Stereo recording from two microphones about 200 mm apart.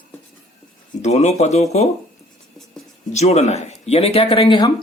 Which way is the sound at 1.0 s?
35° left (ahead or behind).